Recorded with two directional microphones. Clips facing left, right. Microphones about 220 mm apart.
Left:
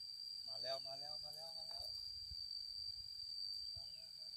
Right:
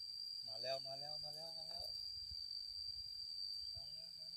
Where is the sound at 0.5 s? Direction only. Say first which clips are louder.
Right 3 dB; 25° right (ahead or behind).